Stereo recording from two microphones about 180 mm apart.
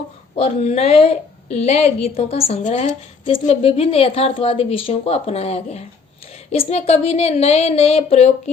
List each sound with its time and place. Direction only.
0.3 s a woman's voice: 35° left (ahead or behind)